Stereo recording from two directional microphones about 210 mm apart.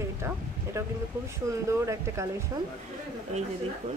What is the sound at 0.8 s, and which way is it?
Speech, 10° right (ahead or behind).